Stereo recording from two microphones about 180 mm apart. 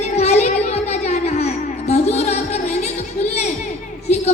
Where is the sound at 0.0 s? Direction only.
40° left (ahead or behind).